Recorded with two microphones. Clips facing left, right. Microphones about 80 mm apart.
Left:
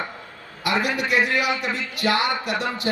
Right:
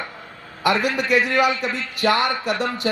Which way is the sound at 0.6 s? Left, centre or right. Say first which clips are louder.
Right 3 dB; right.